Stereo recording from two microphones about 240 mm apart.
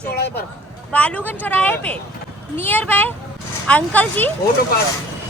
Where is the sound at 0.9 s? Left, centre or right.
Centre.